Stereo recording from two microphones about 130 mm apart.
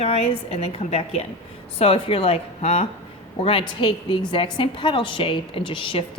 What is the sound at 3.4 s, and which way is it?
A woman's voice, 40° left (ahead or behind).